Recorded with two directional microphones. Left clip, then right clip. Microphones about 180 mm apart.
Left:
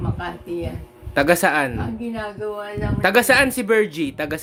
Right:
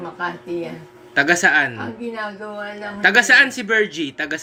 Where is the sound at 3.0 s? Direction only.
55° left (ahead or behind).